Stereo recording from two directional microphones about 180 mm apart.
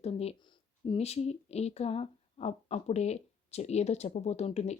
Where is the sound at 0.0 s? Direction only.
35° left (ahead or behind).